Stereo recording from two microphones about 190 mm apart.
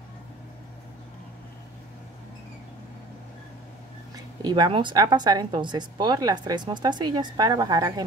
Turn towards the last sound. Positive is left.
turn(degrees=-20)  # may be behind; listen again after turning